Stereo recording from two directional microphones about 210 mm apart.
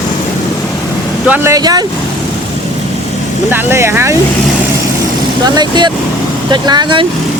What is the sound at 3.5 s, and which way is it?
Speech, 10° right (ahead or behind).